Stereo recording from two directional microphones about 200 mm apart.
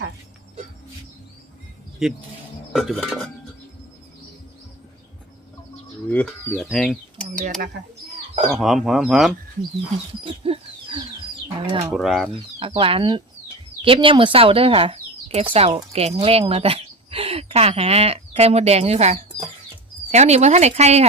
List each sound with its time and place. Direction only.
2.0 s speech: centre (ahead or behind)
6.1 s speech: 5° left (ahead or behind)
8.5 s speech: centre (ahead or behind)
10.2 s a sound: 30° right (ahead or behind)
11.6 s speech: 20° right (ahead or behind)
11.9 s speech: centre (ahead or behind)
12.5 s speech: 25° right (ahead or behind)